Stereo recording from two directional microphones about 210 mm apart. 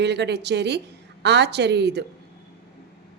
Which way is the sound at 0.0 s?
55° right (ahead or behind).